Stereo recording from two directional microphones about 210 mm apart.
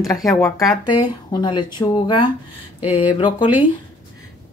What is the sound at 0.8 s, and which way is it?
Speech, 20° left (ahead or behind).